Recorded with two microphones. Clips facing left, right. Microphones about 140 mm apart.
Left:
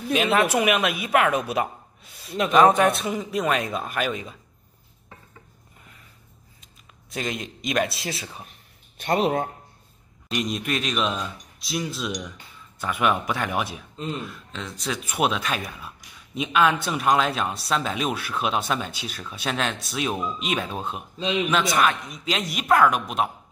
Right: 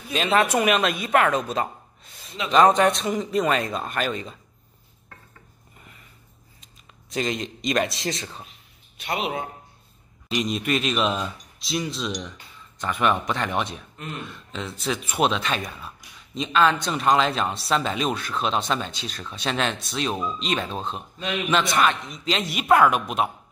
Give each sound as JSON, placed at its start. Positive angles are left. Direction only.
{"t": 0.1, "sound": "speech", "side_deg": 5}
{"t": 7.1, "sound": "speech", "side_deg": 5}
{"t": 8.5, "sound": "a sound", "side_deg": 50}
{"t": 10.2, "sound": "speech", "side_deg": 0}
{"t": 13.9, "sound": "speech", "side_deg": 25}
{"t": 14.2, "sound": "speech", "side_deg": 0}
{"t": 21.2, "sound": "speech", "side_deg": 25}
{"t": 21.5, "sound": "speech", "side_deg": 0}